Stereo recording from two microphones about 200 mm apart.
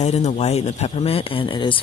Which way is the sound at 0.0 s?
35° left (ahead or behind).